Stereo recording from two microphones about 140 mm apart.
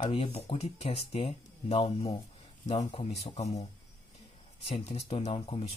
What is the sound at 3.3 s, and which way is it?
Speech, 55° left (ahead or behind).